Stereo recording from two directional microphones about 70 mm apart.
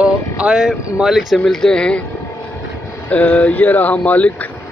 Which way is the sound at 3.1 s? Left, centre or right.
Centre.